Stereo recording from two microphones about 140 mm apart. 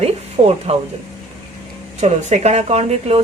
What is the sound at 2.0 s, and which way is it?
Speech, 55° right (ahead or behind).